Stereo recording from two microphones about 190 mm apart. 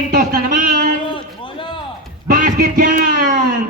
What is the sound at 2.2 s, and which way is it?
Speech, 45° right (ahead or behind).